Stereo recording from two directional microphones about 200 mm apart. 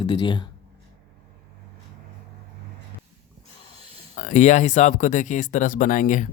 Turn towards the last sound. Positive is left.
turn(degrees=40)  # may be behind; listen again after turning